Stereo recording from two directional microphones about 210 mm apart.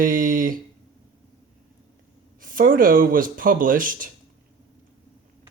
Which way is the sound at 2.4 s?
40° right (ahead or behind).